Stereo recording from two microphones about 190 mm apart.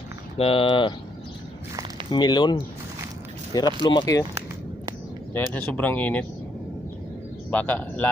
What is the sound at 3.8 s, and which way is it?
Speech, 25° left (ahead or behind).